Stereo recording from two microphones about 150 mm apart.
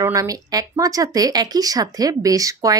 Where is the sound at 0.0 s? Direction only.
20° right (ahead or behind).